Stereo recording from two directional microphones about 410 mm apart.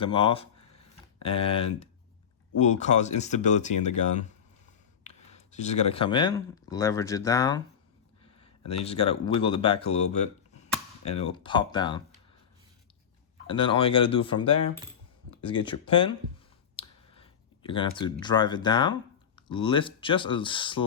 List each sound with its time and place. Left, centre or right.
0.0 s a sound: centre
2.6 s speech: centre
13.5 s speech: centre
15.4 s speech: centre
16.7 s a sound: centre
19.4 s speech: centre